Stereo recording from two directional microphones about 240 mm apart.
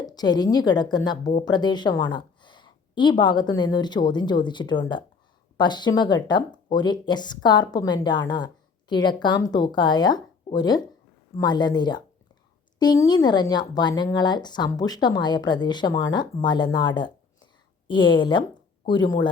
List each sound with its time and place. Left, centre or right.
0.0 s speech: centre